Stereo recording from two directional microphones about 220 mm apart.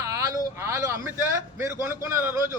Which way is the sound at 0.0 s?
15° right (ahead or behind).